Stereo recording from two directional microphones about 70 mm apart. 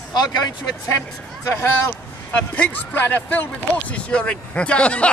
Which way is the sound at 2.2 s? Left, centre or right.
Left.